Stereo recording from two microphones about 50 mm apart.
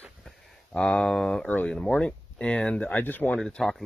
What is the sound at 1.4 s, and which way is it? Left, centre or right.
Speech, left.